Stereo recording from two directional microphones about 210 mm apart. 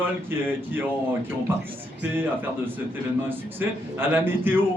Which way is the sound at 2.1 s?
10° right (ahead or behind).